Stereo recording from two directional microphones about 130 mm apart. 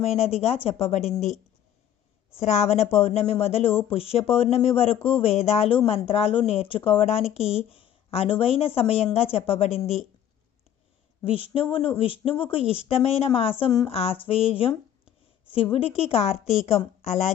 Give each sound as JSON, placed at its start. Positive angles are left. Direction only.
{"t": 0.0, "sound": "speech", "side_deg": 55}
{"t": 2.6, "sound": "speech", "side_deg": 55}
{"t": 11.2, "sound": "speech", "side_deg": 45}
{"t": 13.7, "sound": "speech", "side_deg": 25}
{"t": 13.9, "sound": "speech", "side_deg": 50}